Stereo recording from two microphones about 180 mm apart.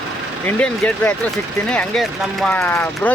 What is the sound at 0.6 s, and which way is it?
Speech, 5° left (ahead or behind).